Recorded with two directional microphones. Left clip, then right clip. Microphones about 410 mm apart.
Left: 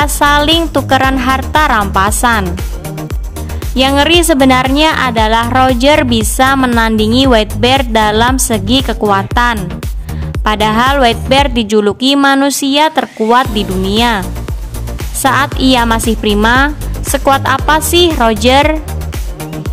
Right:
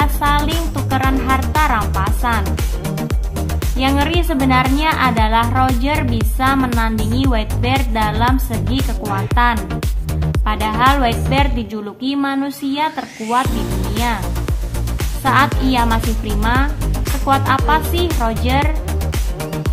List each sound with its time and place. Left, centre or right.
0.0 s speech: left
3.7 s speech: left
15.2 s speech: left